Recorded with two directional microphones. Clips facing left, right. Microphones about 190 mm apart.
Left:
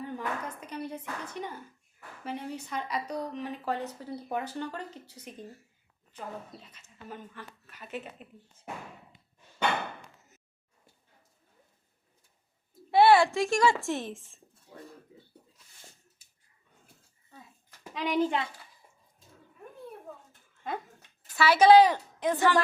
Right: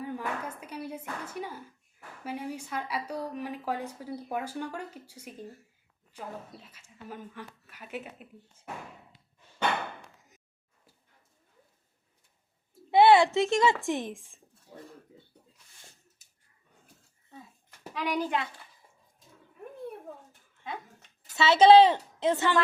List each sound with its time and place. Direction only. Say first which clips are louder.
0.0 s a sound: even; 10° right (ahead or behind)
2.2 s a woman's voice: right 1 dB; 10° right (ahead or behind)
12.9 s a woman's voice: right 1 dB; 20° right (ahead or behind)
17.9 s a child's voice: left 3 dB; 25° left (ahead or behind)
21.3 s a woman's voice: right 1 dB; 25° right (ahead or behind)